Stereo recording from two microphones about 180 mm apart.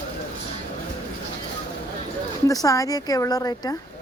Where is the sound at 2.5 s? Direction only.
20° left (ahead or behind).